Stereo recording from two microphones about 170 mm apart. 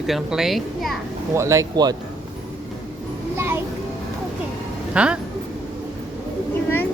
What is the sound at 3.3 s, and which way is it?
Music, 15° right (ahead or behind).